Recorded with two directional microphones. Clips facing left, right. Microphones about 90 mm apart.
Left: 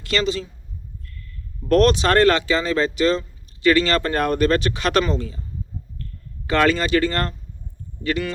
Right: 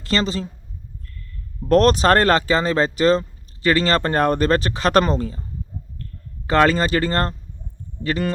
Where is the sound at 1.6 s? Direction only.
35° right (ahead or behind).